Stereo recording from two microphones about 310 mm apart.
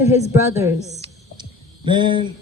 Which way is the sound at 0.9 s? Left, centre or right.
Centre.